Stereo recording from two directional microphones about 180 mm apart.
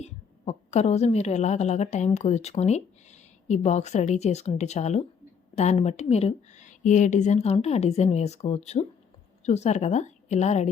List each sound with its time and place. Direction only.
0.0 s a woman's voice: 40° left (ahead or behind)